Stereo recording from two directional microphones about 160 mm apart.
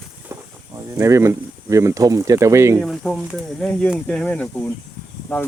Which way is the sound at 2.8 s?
Centre (ahead or behind).